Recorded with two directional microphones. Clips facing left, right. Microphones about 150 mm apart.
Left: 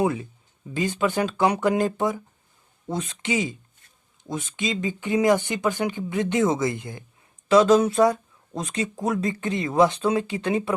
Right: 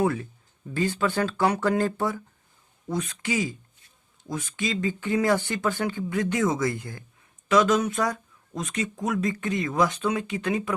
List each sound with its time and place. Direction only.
0.0 s speech: 15° left (ahead or behind)
7.4 s speech: 30° left (ahead or behind)